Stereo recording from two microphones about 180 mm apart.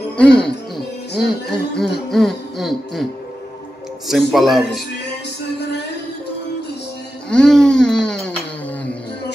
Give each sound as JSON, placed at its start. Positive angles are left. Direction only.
{"t": 0.2, "sound": "music", "side_deg": 5}
{"t": 4.1, "sound": "music", "side_deg": 0}
{"t": 7.2, "sound": "a sound", "side_deg": 5}